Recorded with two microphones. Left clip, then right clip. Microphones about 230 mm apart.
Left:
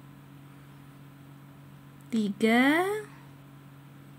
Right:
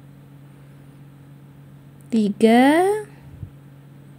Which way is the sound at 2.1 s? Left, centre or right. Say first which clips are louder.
Right 10 dB; centre.